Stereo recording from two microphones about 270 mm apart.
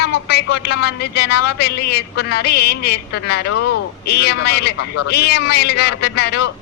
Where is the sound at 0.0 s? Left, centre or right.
Left.